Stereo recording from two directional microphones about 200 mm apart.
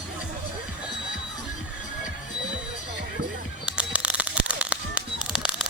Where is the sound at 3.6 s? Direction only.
5° right (ahead or behind).